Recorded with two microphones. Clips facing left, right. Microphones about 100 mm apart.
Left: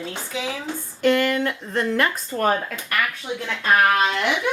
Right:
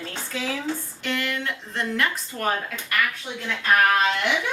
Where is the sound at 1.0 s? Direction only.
50° left (ahead or behind).